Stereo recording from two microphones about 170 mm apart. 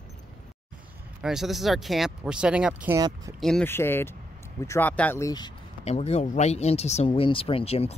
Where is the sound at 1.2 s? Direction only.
Centre (ahead or behind).